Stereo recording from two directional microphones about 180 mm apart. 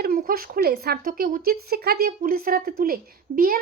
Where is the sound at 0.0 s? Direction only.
55° right (ahead or behind).